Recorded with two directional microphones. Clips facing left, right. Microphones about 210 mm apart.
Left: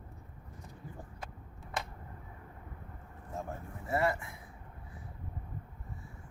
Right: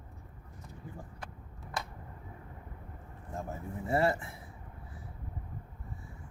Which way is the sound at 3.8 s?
30° right (ahead or behind).